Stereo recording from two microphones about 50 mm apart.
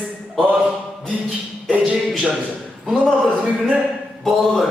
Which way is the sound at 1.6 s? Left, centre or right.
Right.